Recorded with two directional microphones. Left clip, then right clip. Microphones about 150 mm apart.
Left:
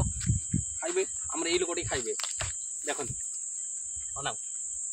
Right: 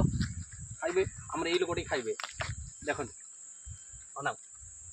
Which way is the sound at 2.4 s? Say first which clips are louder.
Left 3 dB; 10° left (ahead or behind).